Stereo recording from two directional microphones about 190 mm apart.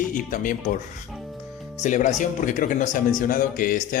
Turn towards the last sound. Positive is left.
turn(degrees=45)  # may be behind; listen again after turning